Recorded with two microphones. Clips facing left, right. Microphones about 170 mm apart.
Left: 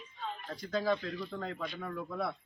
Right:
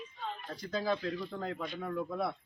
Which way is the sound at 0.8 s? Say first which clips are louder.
Right 1 dB; 5° right (ahead or behind).